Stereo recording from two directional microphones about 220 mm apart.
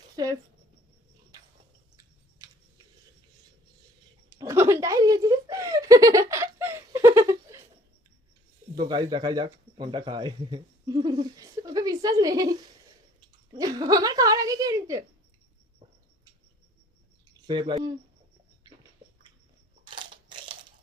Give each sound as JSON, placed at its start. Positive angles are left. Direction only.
{"t": 0.2, "sound": "a sound", "side_deg": -15}
{"t": 4.4, "sound": "chuckle", "side_deg": -10}
{"t": 8.7, "sound": "speech", "side_deg": -20}
{"t": 17.4, "sound": "speech", "side_deg": -20}
{"t": 19.8, "sound": "crushing", "side_deg": -20}